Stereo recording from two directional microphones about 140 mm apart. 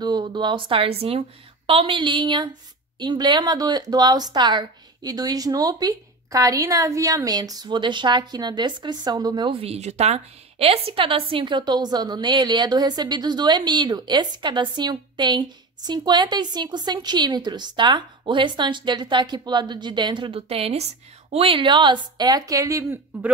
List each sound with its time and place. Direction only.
0.0 s speech: 30° right (ahead or behind)